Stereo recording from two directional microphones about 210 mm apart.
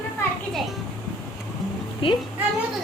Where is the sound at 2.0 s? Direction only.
25° left (ahead or behind).